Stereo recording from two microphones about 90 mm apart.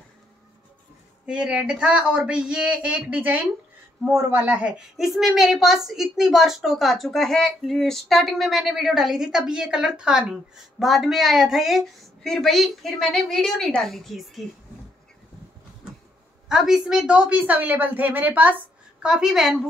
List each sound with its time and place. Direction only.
1.2 s a woman's voice: 10° right (ahead or behind)
4.9 s speech: centre (ahead or behind)
16.4 s a woman's voice: 5° right (ahead or behind)
19.0 s speech: 5° right (ahead or behind)